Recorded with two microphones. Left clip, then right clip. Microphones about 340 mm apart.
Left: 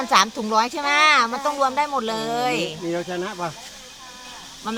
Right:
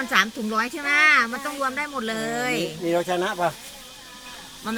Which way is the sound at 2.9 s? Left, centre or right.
Right.